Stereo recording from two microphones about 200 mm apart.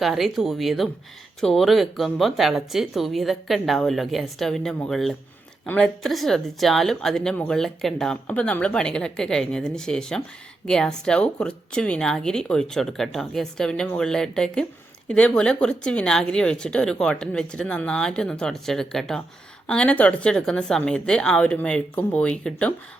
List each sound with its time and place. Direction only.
0.0 s a woman's voice: centre (ahead or behind)